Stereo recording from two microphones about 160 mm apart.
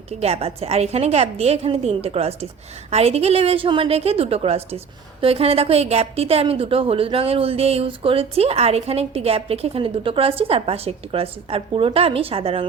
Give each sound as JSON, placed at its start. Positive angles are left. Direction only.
{"t": 0.1, "sound": "a woman's voice", "side_deg": -40}